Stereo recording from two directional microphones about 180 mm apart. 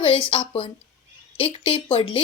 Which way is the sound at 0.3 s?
30° left (ahead or behind).